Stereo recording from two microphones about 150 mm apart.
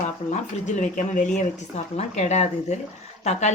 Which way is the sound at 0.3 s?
50° left (ahead or behind).